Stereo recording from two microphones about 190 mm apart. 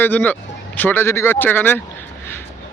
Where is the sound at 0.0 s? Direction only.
10° left (ahead or behind).